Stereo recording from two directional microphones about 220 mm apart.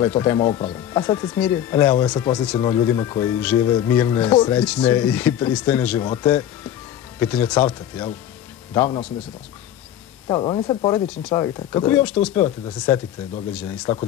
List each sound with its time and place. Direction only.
0.2 s speech: 15° left (ahead or behind)
7.2 s speech: 5° left (ahead or behind)
8.7 s speech: 15° left (ahead or behind)
10.2 s speech: 20° left (ahead or behind); by 13.9 s 5° left (ahead or behind)